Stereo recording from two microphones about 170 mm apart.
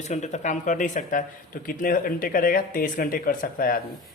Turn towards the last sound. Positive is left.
turn(degrees=55)  # may be behind; listen again after turning